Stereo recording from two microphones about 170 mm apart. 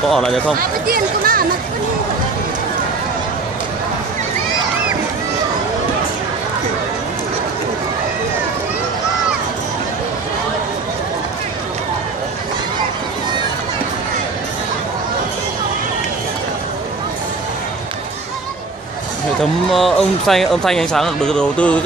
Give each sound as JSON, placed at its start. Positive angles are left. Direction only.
{"t": 0.1, "sound": "speech", "side_deg": 0}
{"t": 0.8, "sound": "speech", "side_deg": -60}
{"t": 19.7, "sound": "speech", "side_deg": 0}